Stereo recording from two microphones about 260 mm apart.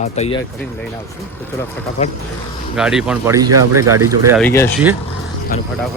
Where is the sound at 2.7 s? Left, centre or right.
Centre.